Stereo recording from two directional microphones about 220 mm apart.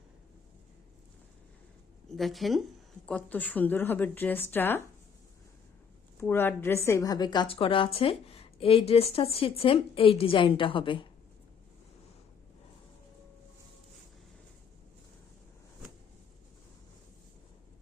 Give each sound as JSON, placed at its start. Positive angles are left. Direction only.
{"t": 2.0, "sound": "speech", "side_deg": 0}
{"t": 6.1, "sound": "speech", "side_deg": 10}